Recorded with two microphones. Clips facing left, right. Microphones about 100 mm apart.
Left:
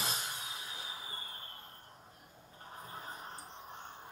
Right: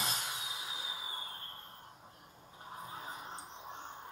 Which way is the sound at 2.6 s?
10° right (ahead or behind).